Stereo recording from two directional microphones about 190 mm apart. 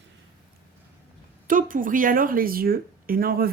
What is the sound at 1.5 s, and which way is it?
Speech, 45° right (ahead or behind).